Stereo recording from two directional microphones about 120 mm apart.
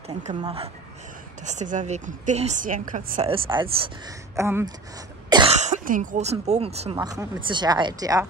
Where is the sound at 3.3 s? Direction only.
45° right (ahead or behind).